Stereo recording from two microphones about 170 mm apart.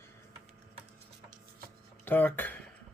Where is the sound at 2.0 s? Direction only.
10° left (ahead or behind).